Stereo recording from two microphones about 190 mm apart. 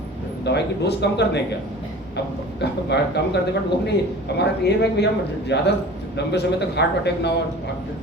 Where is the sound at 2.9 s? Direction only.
65° left (ahead or behind).